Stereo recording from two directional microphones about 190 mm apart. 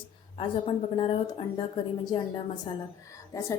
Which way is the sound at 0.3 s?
25° left (ahead or behind).